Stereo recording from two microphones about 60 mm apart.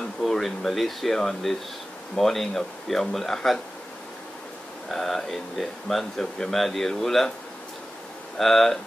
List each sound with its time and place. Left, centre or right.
0.2 s speech: centre
4.8 s speech: centre
8.4 s speech: centre